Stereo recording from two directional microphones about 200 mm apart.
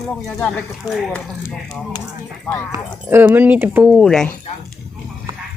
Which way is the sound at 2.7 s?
10° right (ahead or behind).